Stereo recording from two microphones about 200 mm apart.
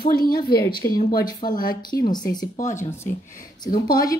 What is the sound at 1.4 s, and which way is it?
Speech, 45° left (ahead or behind).